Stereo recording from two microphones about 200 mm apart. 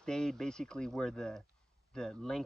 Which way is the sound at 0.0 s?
5° left (ahead or behind).